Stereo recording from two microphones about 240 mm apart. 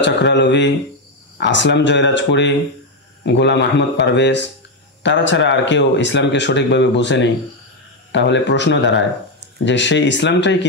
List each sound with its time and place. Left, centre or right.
0.0 s speech: left